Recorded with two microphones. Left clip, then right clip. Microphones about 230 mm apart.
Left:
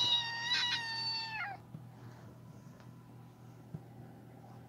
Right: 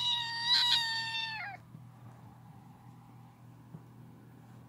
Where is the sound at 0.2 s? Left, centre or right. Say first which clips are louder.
Right 2 dB; right.